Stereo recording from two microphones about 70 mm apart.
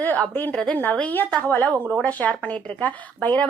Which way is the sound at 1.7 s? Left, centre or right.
Right.